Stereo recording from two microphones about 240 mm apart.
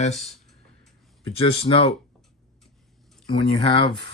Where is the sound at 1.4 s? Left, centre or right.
Left.